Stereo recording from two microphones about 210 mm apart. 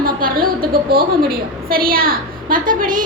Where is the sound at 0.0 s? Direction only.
45° right (ahead or behind).